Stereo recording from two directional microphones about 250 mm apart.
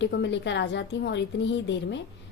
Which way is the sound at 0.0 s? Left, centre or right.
Left.